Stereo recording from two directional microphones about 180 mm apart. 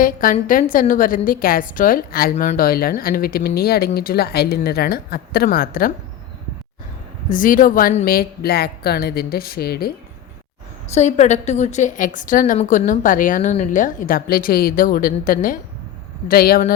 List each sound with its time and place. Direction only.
0.0 s a woman's voice: 50° left (ahead or behind)
7.3 s speech: 50° left (ahead or behind)
10.9 s a woman's voice: 40° left (ahead or behind)